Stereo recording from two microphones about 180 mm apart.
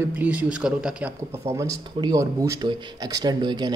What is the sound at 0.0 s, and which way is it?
Speech, 10° right (ahead or behind).